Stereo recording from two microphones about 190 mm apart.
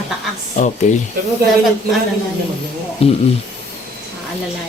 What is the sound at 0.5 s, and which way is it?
Speech, 40° left (ahead or behind).